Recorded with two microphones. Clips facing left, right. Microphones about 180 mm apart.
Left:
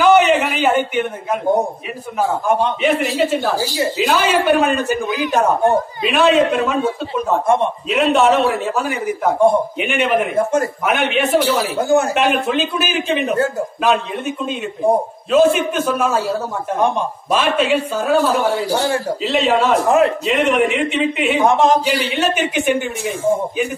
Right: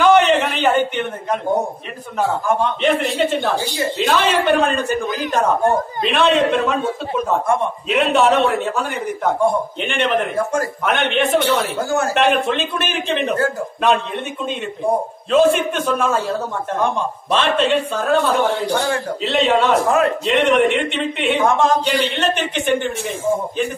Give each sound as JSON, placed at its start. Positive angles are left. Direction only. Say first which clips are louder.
{"t": 0.0, "sound": "a sound", "louder": "left 1 dB", "side_deg": 5}
{"t": 2.8, "sound": "a man's voice", "louder": "left 1 dB", "side_deg": 5}
{"t": 7.4, "sound": "a man's voice", "louder": "left 3 dB", "side_deg": 20}
{"t": 7.9, "sound": "a man's voice", "louder": "left 1 dB", "side_deg": 0}
{"t": 10.3, "sound": "a man's voice", "louder": "left 3 dB", "side_deg": 20}
{"t": 10.9, "sound": "a man's voice", "louder": "even", "side_deg": 5}
{"t": 11.8, "sound": "a man's voice", "louder": "left 5 dB", "side_deg": 20}
{"t": 12.1, "sound": "a man's voice", "louder": "even", "side_deg": 0}
{"t": 15.3, "sound": "a man's voice", "louder": "left 1 dB", "side_deg": 0}
{"t": 16.7, "sound": "a man's voice", "louder": "left 3 dB", "side_deg": 15}
{"t": 17.4, "sound": "a man's voice", "louder": "even", "side_deg": 5}
{"t": 21.5, "sound": "a man's voice", "louder": "left 3 dB", "side_deg": 20}
{"t": 21.8, "sound": "a man's voice", "louder": "left 1 dB", "side_deg": 5}